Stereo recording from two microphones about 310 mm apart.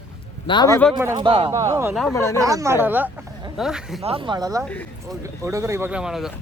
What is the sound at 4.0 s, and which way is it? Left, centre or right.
Speech, centre.